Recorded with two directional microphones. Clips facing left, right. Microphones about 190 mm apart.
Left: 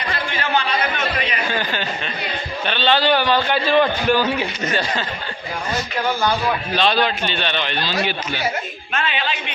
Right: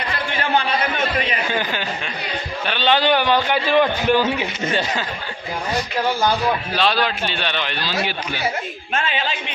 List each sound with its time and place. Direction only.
1.5 s a man's voice: 15° right (ahead or behind)
6.7 s a man's voice: 5° right (ahead or behind)